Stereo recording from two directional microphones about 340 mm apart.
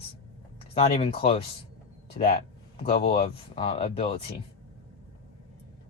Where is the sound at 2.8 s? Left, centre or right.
Centre.